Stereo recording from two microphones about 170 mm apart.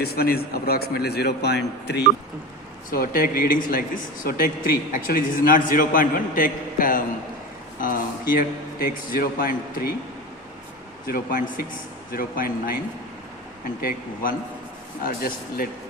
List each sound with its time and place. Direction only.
0.0 s a man's voice: 65° left (ahead or behind)
2.9 s speech: 60° left (ahead or behind)
8.3 s speech: 55° left (ahead or behind)
11.0 s speech: 55° left (ahead or behind)
13.8 s speech: 55° left (ahead or behind)